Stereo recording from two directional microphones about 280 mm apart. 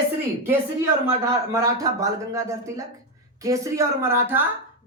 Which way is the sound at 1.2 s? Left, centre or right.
Centre.